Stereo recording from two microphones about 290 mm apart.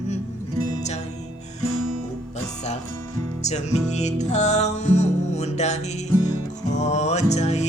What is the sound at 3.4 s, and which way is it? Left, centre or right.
Music, left.